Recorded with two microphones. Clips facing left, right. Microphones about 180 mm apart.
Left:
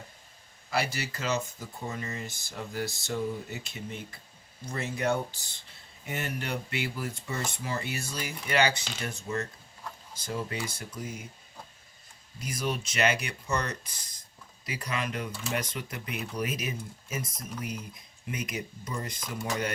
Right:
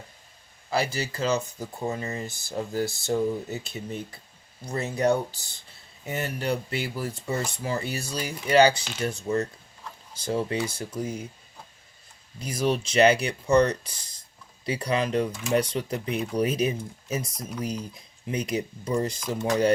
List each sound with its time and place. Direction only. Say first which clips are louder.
0.7 s speech: right 4 dB; 35° right (ahead or behind)
12.4 s speech: right 7 dB; 30° right (ahead or behind)
18.3 s speech: right 7 dB; 30° right (ahead or behind)